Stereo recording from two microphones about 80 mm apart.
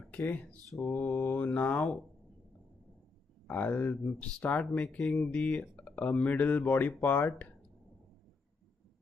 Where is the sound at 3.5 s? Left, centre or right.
Left.